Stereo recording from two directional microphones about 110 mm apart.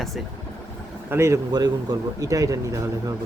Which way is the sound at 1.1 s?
25° right (ahead or behind).